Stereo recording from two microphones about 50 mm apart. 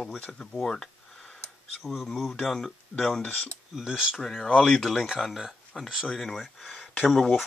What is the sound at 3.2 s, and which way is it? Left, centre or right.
Speech, left.